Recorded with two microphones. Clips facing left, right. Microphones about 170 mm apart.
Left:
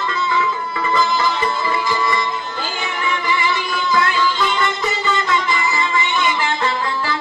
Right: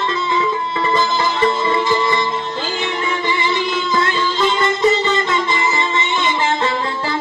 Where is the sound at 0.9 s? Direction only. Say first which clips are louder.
Left 1 dB; 20° right (ahead or behind).